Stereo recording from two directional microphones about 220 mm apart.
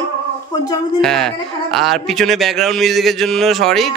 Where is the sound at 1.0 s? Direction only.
Centre (ahead or behind).